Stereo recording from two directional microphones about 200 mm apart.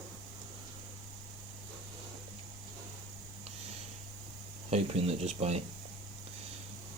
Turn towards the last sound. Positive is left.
turn(degrees=-30)  # may be behind; listen again after turning